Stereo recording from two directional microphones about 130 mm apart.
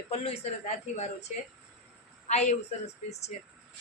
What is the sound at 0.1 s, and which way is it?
Speech, 55° left (ahead or behind).